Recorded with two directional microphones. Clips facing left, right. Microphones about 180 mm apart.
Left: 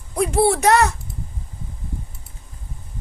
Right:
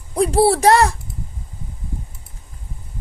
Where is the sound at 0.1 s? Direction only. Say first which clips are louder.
Right 3 dB; 35° right (ahead or behind).